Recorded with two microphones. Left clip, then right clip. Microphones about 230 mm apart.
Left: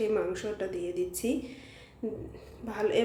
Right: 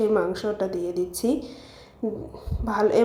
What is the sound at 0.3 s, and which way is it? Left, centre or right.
Speech, centre.